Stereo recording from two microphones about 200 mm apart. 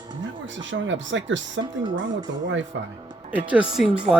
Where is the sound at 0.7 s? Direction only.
65° right (ahead or behind).